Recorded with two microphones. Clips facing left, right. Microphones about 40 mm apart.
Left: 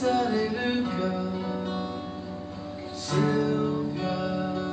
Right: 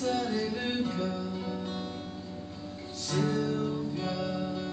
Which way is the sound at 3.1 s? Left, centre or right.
Centre.